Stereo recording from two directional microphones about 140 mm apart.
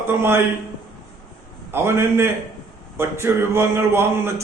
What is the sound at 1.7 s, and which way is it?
Mantra, 20° right (ahead or behind).